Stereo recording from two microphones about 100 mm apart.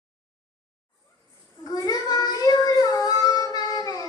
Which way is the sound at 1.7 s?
40° left (ahead or behind).